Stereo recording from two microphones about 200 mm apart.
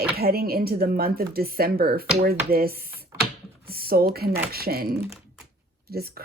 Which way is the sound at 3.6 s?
50° right (ahead or behind).